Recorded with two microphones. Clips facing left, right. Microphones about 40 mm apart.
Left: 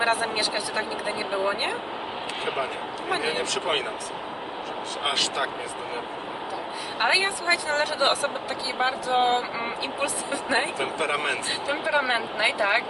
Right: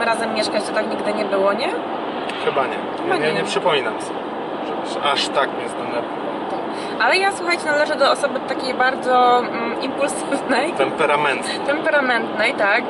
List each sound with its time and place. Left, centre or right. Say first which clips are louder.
0.0 s speech: right 5 dB; centre
1.3 s speech: right 7 dB; right
3.1 s speech: right 7 dB; right
5.0 s speech: right 7 dB; right
7.0 s speech: right 6 dB; centre
8.8 s speech: right 8 dB; right
10.8 s speech: right 9 dB; right